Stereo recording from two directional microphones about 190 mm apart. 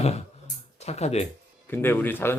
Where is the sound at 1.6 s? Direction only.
10° left (ahead or behind).